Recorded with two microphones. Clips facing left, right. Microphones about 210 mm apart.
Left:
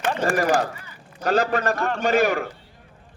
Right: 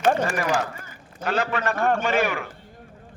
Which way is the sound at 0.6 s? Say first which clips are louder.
Left 3 dB; 45° right (ahead or behind).